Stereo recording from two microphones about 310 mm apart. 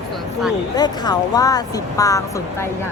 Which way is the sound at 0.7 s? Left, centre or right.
Centre.